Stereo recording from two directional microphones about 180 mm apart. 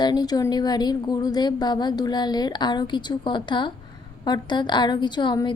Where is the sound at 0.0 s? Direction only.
20° left (ahead or behind).